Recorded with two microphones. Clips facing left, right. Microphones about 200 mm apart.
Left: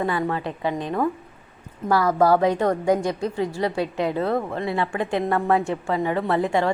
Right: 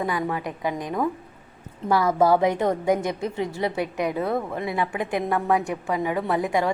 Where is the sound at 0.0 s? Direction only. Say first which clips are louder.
Left 2 dB; 15° right (ahead or behind).